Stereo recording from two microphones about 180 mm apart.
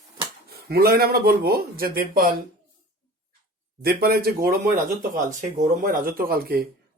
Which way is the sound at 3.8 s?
55° right (ahead or behind).